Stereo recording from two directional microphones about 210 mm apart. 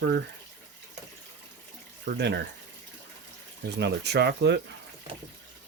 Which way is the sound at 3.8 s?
50° right (ahead or behind).